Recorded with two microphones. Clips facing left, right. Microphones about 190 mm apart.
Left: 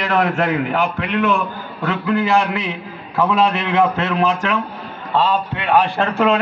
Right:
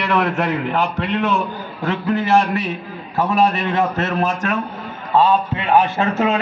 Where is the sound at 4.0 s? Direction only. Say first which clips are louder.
Left 2 dB; 50° right (ahead or behind).